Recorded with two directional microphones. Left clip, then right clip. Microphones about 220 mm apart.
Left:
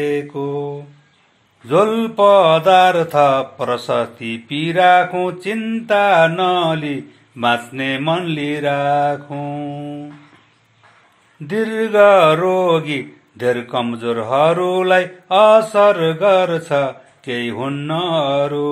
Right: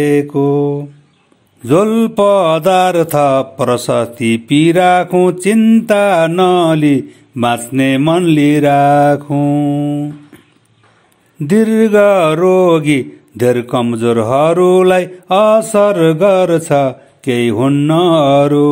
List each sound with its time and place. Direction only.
0.0 s mantra: 50° right (ahead or behind)
11.4 s mantra: 50° right (ahead or behind)